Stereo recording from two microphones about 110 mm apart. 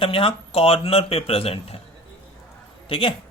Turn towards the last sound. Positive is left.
turn(degrees=55)  # may be behind; listen again after turning